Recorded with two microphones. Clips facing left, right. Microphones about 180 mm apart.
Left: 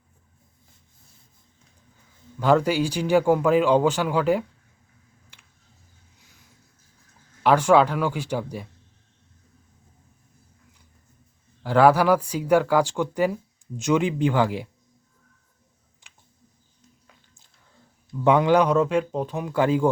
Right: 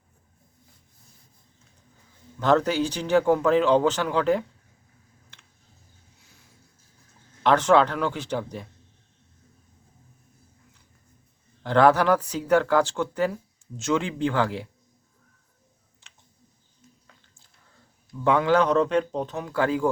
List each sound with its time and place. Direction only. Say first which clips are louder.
2.4 s speech: left 1 dB; 10° left (ahead or behind)
5.3 s tick: even; 10° left (ahead or behind)
7.4 s speech: left 2 dB; 10° left (ahead or behind)
11.6 s speech: left 1 dB; 10° left (ahead or behind)
18.1 s speech: left 3 dB; 20° left (ahead or behind)